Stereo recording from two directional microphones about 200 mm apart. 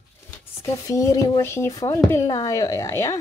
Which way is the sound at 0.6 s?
15° left (ahead or behind).